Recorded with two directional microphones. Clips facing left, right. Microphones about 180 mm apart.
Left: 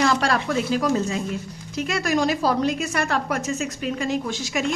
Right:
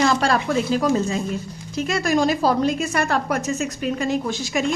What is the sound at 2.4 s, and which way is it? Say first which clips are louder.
A woman's voice: right 2 dB; 30° right (ahead or behind).